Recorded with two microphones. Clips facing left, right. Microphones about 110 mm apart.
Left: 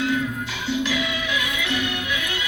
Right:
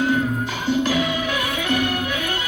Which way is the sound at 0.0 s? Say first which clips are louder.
Right 4 dB; 45° right (ahead or behind).